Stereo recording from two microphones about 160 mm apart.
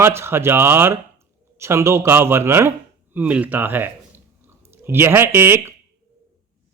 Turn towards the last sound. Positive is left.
turn(degrees=-15)  # may be behind; listen again after turning